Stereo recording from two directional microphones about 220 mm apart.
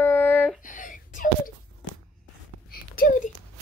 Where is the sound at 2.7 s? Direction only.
40° left (ahead or behind).